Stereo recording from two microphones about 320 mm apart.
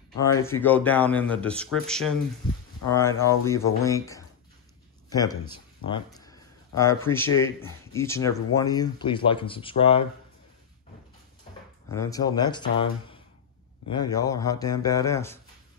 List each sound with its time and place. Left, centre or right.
0.2 s speech: centre
5.5 s a sound: centre
7.1 s speech: centre
11.9 s speech: centre